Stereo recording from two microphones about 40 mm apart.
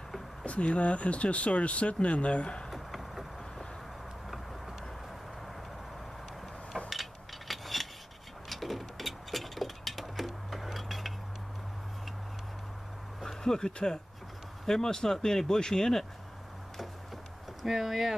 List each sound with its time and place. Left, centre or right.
0.5 s speech: left
2.7 s vehicle: centre
6.9 s a sound: centre
13.2 s vehicle: centre
14.7 s speech: centre
17.6 s speech: centre